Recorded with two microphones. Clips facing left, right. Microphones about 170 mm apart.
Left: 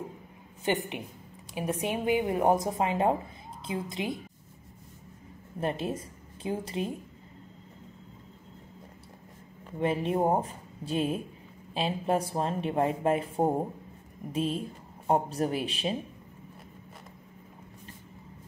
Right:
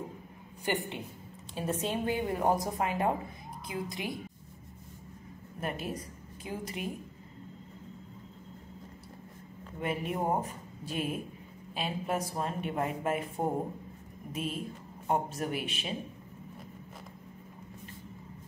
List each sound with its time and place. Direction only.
0.7 s speech: 20° left (ahead or behind)
5.6 s a woman's voice: 25° left (ahead or behind)
9.8 s a man's voice: 30° left (ahead or behind)